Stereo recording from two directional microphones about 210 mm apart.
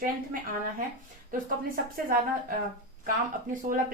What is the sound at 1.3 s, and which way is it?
Speech, 40° right (ahead or behind).